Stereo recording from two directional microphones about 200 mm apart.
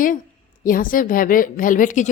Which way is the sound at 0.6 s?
45° left (ahead or behind).